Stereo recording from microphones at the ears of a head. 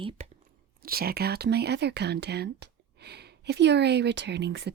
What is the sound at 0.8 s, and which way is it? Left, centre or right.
Speech, right.